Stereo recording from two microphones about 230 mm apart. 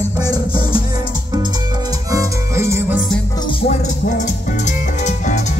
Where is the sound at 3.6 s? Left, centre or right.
Left.